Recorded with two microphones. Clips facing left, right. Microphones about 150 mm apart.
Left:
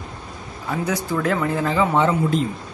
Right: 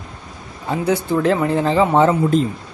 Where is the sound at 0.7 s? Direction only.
30° right (ahead or behind).